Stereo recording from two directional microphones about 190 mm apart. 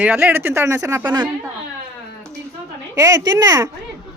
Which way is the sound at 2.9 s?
15° right (ahead or behind).